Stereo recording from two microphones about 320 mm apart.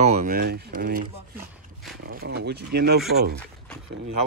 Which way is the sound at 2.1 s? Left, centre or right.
Right.